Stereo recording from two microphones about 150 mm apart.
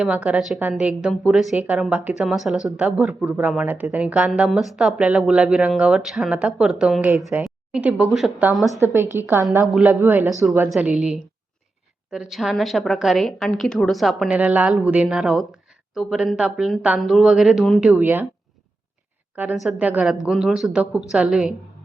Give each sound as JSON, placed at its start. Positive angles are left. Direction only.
{"t": 0.0, "sound": "a woman's voice", "side_deg": -10}
{"t": 19.6, "sound": "a woman's voice", "side_deg": -10}